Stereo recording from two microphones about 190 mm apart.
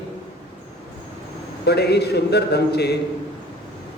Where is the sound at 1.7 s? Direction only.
60° left (ahead or behind).